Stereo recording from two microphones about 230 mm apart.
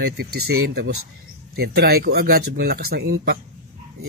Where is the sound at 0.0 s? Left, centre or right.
Right.